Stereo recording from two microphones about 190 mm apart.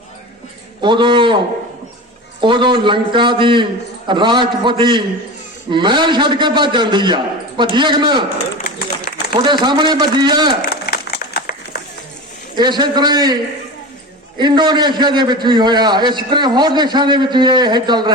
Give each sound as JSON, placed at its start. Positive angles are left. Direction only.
{"t": 0.8, "sound": "a man's voice", "side_deg": -25}
{"t": 2.4, "sound": "a man's voice", "side_deg": -25}
{"t": 9.3, "sound": "a man's voice", "side_deg": -25}
{"t": 10.6, "sound": "a sound", "side_deg": 55}
{"t": 12.5, "sound": "a man's voice", "side_deg": -20}